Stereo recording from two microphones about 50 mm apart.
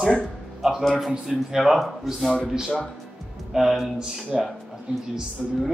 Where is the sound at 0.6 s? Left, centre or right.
Centre.